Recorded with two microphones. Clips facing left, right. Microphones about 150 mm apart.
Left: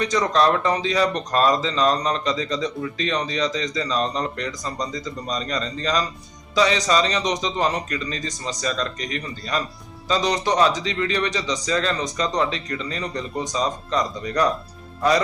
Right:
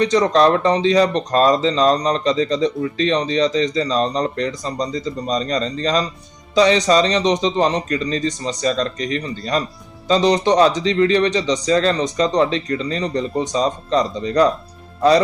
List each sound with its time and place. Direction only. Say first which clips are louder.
0.0 s speech: right 5 dB; 35° right (ahead or behind)